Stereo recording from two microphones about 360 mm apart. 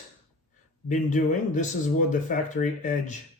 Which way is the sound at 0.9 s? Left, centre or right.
Centre.